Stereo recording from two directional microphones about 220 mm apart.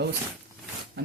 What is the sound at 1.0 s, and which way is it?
Rub, 50° right (ahead or behind).